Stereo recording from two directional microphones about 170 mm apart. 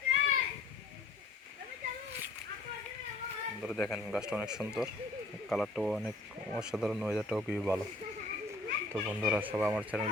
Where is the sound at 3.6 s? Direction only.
Centre (ahead or behind).